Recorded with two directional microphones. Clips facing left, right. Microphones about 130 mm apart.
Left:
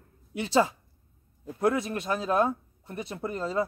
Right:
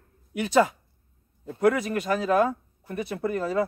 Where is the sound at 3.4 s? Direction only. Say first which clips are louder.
Right 2 dB; 60° right (ahead or behind).